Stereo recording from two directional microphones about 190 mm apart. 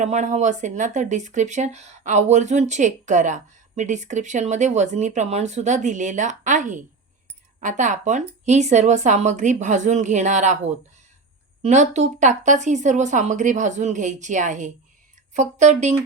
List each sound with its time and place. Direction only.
0.0 s speech: 40° right (ahead or behind)
11.6 s speech: 40° right (ahead or behind)